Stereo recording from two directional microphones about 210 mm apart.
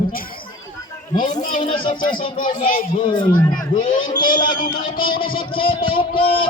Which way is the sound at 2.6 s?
40° left (ahead or behind).